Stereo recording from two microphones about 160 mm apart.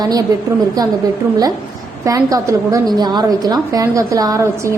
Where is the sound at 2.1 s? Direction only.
20° right (ahead or behind).